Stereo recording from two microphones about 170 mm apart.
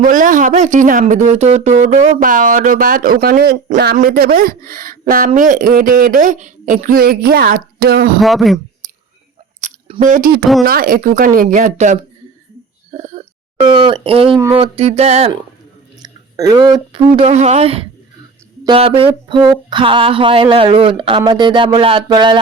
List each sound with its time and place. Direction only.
0.0 s speech: 50° right (ahead or behind)
8.2 s speech: centre (ahead or behind)
9.6 s drip: 40° right (ahead or behind)
10.0 s speech: 55° right (ahead or behind)
12.9 s throat clearing: 40° right (ahead or behind)
13.6 s speech: 30° right (ahead or behind)
14.3 s speech: 15° right (ahead or behind)
14.6 s speech: 35° right (ahead or behind)
16.0 s speech: 25° right (ahead or behind)